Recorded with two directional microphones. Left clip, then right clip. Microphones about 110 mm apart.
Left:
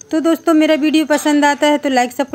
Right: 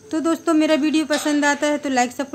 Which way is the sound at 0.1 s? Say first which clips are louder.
Left 6 dB; 35° left (ahead or behind).